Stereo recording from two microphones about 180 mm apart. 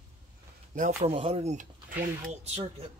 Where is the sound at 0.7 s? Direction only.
40° right (ahead or behind).